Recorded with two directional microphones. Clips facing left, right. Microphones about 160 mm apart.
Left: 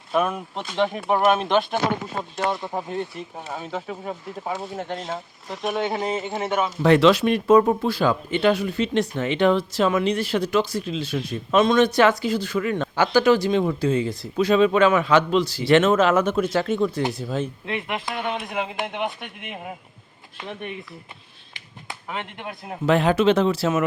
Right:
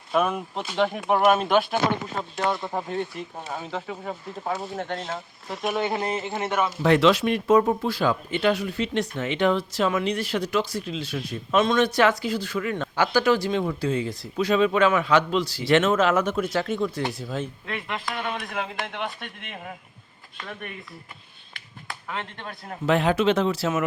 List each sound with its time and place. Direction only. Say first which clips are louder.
0.1 s speech: left 1 dB; centre (ahead or behind)
6.8 s speech: left 3 dB; 35° left (ahead or behind)
16.3 s speech: left 3 dB; 45° left (ahead or behind)
17.3 s speech: left 4 dB; 20° left (ahead or behind)
22.9 s speech: left 3 dB; 40° left (ahead or behind)